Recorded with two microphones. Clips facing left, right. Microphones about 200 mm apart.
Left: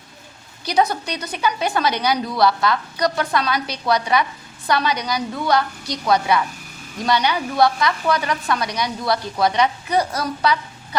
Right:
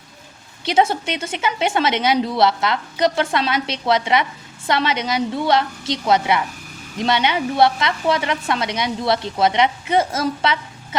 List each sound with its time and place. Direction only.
0.6 s a woman's voice: 25° right (ahead or behind)